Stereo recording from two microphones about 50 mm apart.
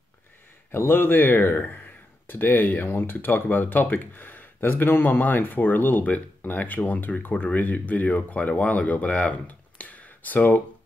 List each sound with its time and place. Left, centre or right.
0.7 s speech: left